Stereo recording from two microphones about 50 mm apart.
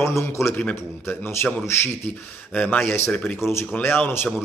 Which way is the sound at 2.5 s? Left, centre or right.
Left.